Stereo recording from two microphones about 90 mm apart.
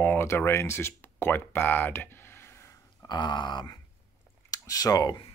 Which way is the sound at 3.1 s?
60° left (ahead or behind).